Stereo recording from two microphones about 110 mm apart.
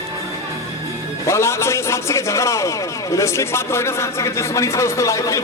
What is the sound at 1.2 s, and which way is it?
A man's voice, 25° left (ahead or behind).